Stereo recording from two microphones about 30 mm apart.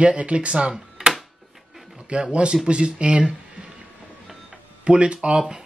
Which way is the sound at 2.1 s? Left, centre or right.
Right.